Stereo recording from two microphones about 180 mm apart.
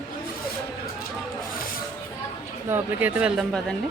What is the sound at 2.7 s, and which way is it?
Speech, 10° right (ahead or behind).